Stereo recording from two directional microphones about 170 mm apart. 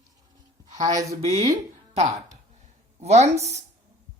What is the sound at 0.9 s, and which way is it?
Speech, 20° right (ahead or behind).